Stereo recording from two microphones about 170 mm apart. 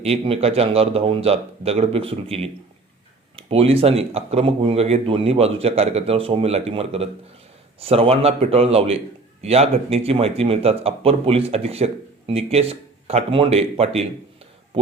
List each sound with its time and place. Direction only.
0.0 s speech: 35° right (ahead or behind)